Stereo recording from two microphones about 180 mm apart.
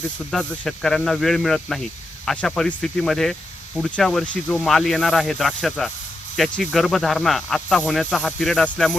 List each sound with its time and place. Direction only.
0.3 s speech: 5° left (ahead or behind)